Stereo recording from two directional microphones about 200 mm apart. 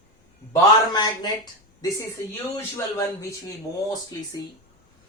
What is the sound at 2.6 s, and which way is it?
Speech, 15° left (ahead or behind).